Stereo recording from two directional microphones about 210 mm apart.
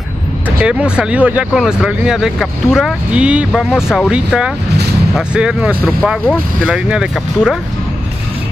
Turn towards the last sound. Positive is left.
turn(degrees=-5)  # may be behind; listen again after turning